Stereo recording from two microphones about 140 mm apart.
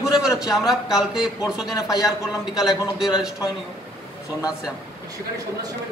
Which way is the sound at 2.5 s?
30° left (ahead or behind).